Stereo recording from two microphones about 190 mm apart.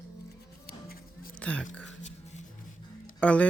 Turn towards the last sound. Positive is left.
turn(degrees=5)  # may be behind; listen again after turning